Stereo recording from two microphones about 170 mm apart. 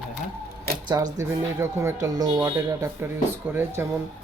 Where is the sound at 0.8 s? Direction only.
25° right (ahead or behind).